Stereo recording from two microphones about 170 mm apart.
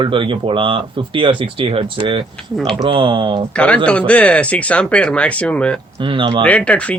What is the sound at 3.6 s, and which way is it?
Speech, 5° left (ahead or behind).